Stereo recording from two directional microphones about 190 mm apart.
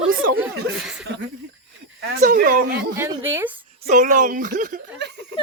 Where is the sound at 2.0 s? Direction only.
65° right (ahead or behind).